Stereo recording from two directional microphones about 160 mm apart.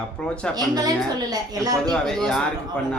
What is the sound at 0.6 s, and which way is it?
A woman's voice, 25° right (ahead or behind).